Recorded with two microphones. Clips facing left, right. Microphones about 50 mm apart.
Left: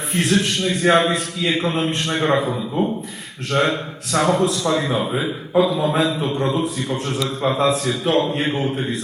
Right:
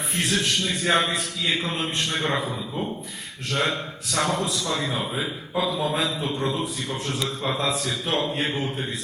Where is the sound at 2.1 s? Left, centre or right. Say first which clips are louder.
Left 8 dB; left.